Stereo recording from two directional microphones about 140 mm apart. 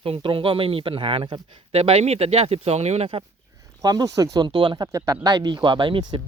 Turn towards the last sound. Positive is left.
turn(degrees=-35)  # may be behind; listen again after turning